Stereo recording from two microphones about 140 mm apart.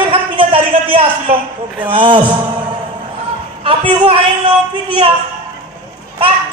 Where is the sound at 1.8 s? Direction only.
35° right (ahead or behind).